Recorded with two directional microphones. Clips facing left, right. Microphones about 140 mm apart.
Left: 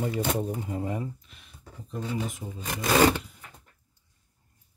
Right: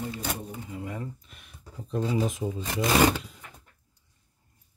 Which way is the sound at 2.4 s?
90° right.